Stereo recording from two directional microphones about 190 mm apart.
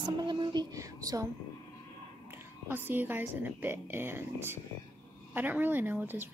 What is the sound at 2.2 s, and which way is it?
Speech, 10° right (ahead or behind).